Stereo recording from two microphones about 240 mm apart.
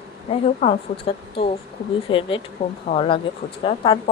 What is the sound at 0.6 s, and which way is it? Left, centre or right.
Speech, left.